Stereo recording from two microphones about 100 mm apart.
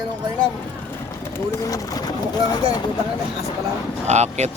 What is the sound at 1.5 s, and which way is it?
Speech, 35° left (ahead or behind).